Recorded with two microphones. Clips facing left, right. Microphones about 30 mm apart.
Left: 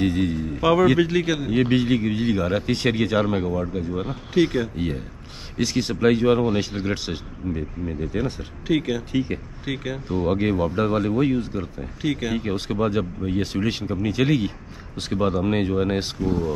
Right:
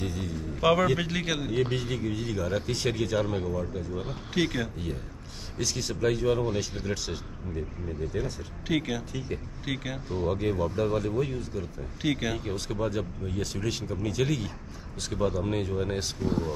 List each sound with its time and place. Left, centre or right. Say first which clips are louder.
0.0 s a man's voice: left 12 dB; left
0.6 s a man's voice: left 6 dB; centre
1.5 s speech: left 12 dB; left
4.3 s a man's voice: left 8 dB; centre
4.7 s speech: left 8 dB; left
8.6 s a man's voice: left 6 dB; centre
9.1 s speech: left 10 dB; left
9.7 s a man's voice: left 5 dB; centre
10.0 s speech: left 6 dB; left
12.0 s speech: left 4 dB; centre
12.4 s speech: left 7 dB; left